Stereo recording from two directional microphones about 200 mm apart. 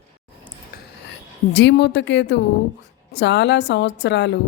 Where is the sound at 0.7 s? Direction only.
45° left (ahead or behind).